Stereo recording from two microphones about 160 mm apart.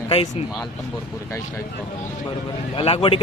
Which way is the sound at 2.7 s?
35° left (ahead or behind).